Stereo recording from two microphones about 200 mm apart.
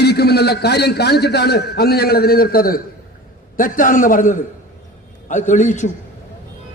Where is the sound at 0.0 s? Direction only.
55° left (ahead or behind).